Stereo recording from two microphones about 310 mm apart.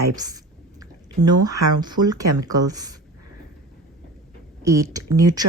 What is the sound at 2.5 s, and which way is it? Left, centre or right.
Speech, centre.